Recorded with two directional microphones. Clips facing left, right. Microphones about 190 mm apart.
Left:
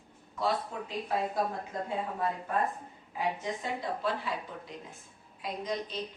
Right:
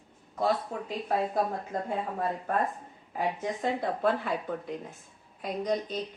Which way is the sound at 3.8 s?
55° right (ahead or behind).